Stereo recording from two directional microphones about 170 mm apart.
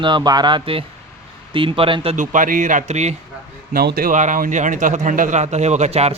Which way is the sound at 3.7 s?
60° right (ahead or behind).